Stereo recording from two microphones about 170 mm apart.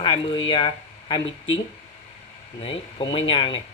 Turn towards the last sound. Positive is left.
turn(degrees=30)  # may be behind; listen again after turning